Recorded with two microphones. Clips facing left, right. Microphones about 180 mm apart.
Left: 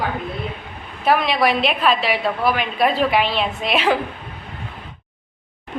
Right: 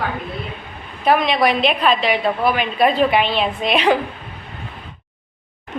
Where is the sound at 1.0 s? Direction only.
5° left (ahead or behind).